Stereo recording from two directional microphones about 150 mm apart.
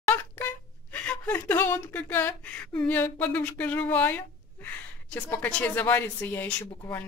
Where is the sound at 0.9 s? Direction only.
10° left (ahead or behind).